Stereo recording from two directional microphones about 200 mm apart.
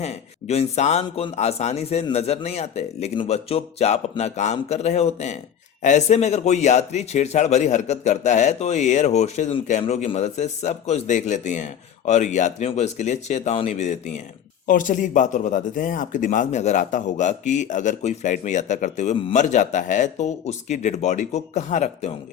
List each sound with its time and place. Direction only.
0.0 s a man's voice: 30° left (ahead or behind)